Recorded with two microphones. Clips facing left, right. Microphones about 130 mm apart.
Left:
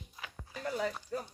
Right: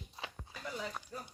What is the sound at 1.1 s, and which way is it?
Speech, 90° left.